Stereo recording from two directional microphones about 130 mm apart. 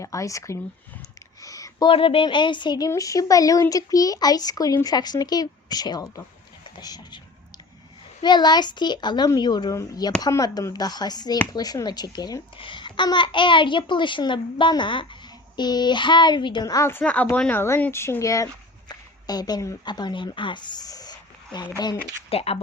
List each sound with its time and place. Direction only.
0.0 s speech: 25° left (ahead or behind)
1.4 s a sound: 25° left (ahead or behind)
1.9 s speech: 45° left (ahead or behind)
8.2 s a woman's voice: 35° left (ahead or behind)
17.0 s speech: 10° left (ahead or behind); by 21.7 s 30° left (ahead or behind)
22.3 s speech: 50° left (ahead or behind)